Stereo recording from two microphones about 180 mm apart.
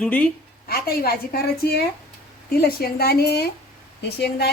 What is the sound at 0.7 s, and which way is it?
A woman's voice, 55° left (ahead or behind).